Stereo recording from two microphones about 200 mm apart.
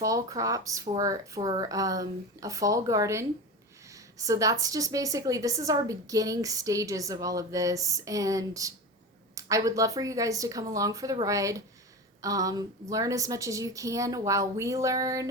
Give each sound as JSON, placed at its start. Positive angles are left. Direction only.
{"t": 0.0, "sound": "a woman's voice", "side_deg": -15}
{"t": 3.8, "sound": "a sound", "side_deg": -15}
{"t": 4.6, "sound": "a woman's voice", "side_deg": -15}